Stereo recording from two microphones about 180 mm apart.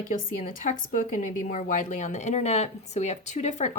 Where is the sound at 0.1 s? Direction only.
50° left (ahead or behind).